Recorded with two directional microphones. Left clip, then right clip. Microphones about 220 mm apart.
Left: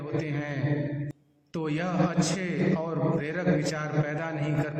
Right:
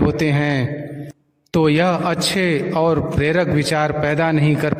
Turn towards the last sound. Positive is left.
turn(degrees=-50)  # may be behind; listen again after turning